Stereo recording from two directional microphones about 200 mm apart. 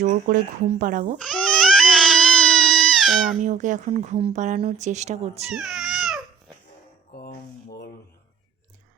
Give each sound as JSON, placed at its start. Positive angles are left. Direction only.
{"t": 0.0, "sound": "speech", "side_deg": -45}
{"t": 1.2, "sound": "crying", "side_deg": 5}
{"t": 3.4, "sound": "speech", "side_deg": -40}
{"t": 5.5, "sound": "baby cry", "side_deg": 0}
{"t": 7.2, "sound": "a sound", "side_deg": 50}